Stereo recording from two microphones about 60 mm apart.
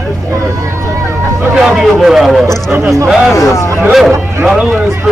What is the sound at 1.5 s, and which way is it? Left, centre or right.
Speech, centre.